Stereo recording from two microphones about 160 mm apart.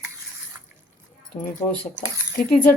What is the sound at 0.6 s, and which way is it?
Water, 10° right (ahead or behind).